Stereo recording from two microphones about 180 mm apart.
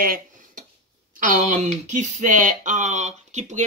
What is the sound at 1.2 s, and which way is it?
Speech, 45° right (ahead or behind).